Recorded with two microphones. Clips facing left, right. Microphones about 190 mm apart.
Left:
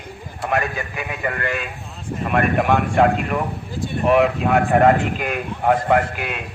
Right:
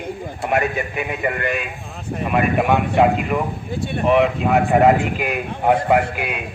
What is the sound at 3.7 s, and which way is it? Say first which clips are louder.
Speech: right 2 dB; 65° right (ahead or behind).